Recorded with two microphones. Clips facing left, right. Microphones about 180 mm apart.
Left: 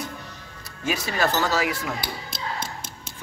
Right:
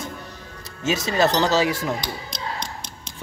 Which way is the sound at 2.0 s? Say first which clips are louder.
Right 1 dB; 5° left (ahead or behind).